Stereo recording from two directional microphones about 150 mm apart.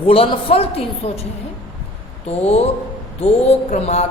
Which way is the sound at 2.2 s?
45° left (ahead or behind).